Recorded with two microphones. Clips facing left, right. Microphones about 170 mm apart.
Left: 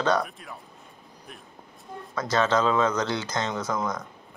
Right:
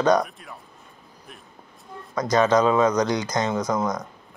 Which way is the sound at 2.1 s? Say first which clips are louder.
Right 5 dB; 15° right (ahead or behind).